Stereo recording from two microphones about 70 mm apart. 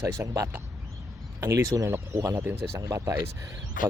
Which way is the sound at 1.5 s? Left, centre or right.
Right.